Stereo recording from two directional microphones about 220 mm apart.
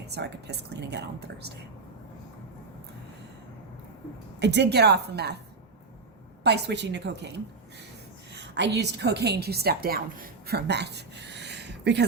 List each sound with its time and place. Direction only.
0.1 s a woman's voice: 50° right (ahead or behind)
4.4 s a woman's voice: 50° right (ahead or behind)
6.4 s a woman's voice: 50° right (ahead or behind)